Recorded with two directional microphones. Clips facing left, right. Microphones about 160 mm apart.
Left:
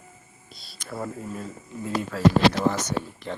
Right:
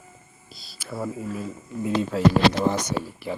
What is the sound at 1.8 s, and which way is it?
Speech, 25° right (ahead or behind).